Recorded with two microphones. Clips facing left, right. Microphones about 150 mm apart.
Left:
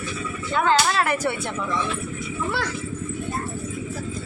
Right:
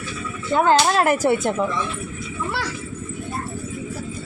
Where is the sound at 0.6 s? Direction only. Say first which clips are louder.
Right 4 dB; 35° right (ahead or behind).